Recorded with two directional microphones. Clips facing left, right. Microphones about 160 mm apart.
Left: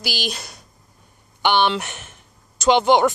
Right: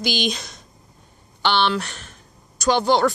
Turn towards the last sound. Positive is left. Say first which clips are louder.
# left 3 dB
turn(degrees=20)  # may be behind; listen again after turning